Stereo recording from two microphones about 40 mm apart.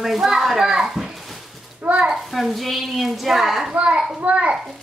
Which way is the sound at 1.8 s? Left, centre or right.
Right.